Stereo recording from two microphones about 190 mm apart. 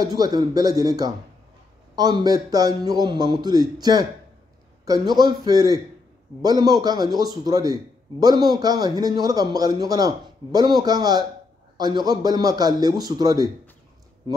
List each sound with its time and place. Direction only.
0.0 s a man's voice: 20° right (ahead or behind)